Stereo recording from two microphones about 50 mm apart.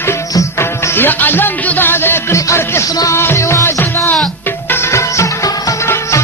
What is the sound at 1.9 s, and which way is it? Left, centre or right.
Music, left.